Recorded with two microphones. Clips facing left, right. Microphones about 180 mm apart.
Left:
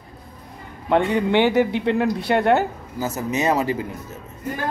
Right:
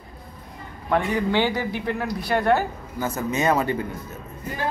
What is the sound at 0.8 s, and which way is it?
A woman's voice, 20° left (ahead or behind).